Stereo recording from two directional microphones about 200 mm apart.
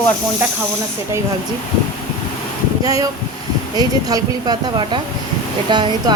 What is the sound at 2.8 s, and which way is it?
A woman's voice, 15° right (ahead or behind).